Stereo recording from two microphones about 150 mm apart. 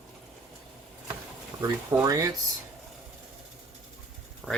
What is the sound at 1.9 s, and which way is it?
Speech, 20° right (ahead or behind).